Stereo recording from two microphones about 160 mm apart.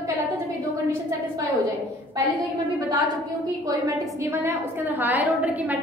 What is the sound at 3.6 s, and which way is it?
A woman's voice, 20° right (ahead or behind).